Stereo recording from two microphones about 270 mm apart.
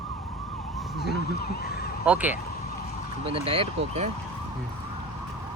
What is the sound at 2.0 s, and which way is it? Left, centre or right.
Speech, centre.